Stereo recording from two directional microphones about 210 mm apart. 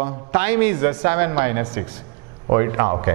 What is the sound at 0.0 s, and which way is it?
Speech, 10° right (ahead or behind).